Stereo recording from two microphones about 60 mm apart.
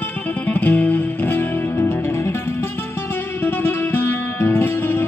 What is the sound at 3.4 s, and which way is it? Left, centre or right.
Music, left.